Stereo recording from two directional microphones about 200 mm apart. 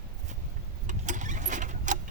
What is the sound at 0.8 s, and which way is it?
Vehicle, 40° right (ahead or behind).